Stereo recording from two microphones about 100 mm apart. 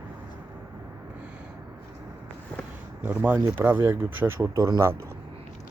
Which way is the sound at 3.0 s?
15° right (ahead or behind).